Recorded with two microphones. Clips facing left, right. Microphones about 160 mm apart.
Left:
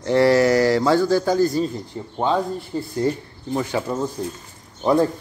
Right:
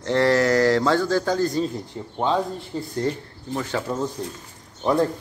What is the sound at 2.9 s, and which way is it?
Speech, 15° left (ahead or behind).